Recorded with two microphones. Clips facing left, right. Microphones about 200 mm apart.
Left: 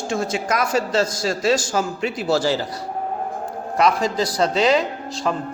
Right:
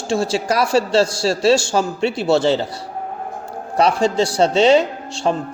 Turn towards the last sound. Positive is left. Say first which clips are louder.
# right 3 dB
turn(degrees=-30)  # may be behind; listen again after turning